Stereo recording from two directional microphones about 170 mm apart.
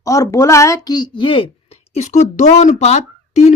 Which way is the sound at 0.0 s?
20° left (ahead or behind).